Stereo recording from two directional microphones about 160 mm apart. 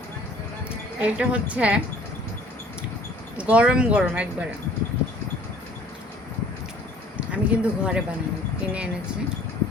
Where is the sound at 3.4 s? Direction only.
10° right (ahead or behind).